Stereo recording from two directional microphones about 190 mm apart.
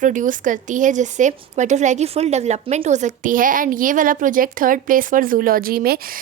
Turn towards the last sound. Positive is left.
turn(degrees=-50)  # may be behind; listen again after turning